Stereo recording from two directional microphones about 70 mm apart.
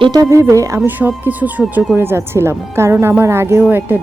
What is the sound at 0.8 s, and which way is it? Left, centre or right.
Speech, right.